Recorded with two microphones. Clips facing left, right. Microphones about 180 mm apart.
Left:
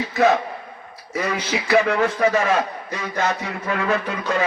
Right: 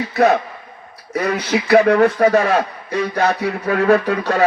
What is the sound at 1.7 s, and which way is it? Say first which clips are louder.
A man's voice: right 6 dB; 60° right (ahead or behind).